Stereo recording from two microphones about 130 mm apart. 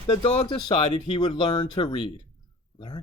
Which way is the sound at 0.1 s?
45° left (ahead or behind).